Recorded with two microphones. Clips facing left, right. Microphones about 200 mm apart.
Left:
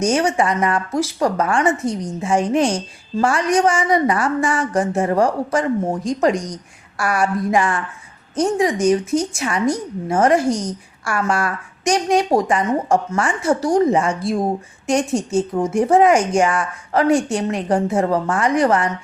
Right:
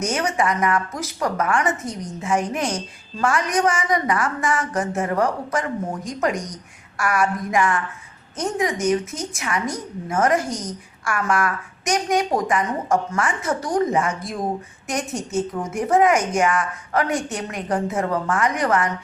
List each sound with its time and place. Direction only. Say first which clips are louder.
0.0 s a woman's voice: left 5 dB; 30° left (ahead or behind)